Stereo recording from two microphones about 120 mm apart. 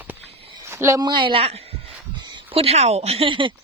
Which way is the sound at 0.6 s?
25° right (ahead or behind).